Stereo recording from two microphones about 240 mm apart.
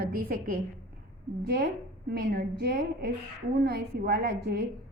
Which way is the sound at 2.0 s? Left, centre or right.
Right.